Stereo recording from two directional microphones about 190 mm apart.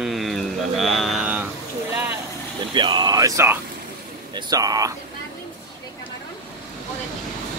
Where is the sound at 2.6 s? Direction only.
25° right (ahead or behind).